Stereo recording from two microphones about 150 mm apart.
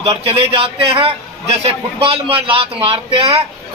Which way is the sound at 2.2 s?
35° right (ahead or behind).